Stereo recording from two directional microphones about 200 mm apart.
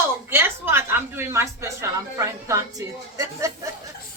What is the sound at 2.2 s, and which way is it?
A woman's voice, 15° right (ahead or behind).